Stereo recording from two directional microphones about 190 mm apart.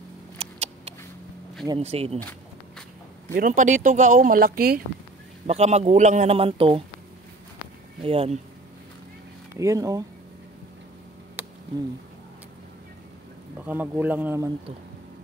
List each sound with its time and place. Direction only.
0.4 s a sound: 30° right (ahead or behind)
1.8 s a man's voice: 35° right (ahead or behind)
3.3 s speech: 45° right (ahead or behind)
5.5 s a man's voice: 35° right (ahead or behind)
8.0 s a man's voice: 30° right (ahead or behind)
9.6 s speech: 15° right (ahead or behind)
13.7 s speech: 10° right (ahead or behind)